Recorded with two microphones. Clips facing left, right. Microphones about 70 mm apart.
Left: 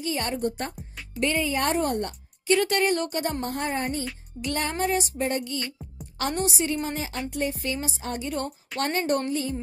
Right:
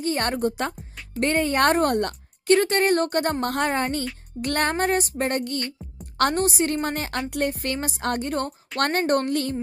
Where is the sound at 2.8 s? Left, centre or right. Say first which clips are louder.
Right 4 dB; right.